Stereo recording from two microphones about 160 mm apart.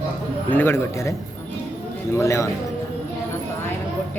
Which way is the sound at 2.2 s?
20° left (ahead or behind).